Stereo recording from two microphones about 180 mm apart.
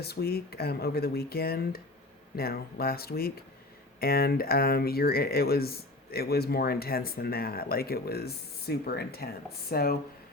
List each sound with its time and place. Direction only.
0.0 s speech: 60° left (ahead or behind)